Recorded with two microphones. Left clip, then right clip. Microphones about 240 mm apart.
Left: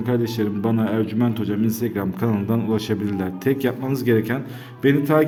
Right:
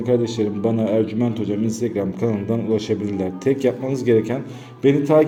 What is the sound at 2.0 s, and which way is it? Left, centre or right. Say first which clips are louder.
Speech: right 3 dB; left.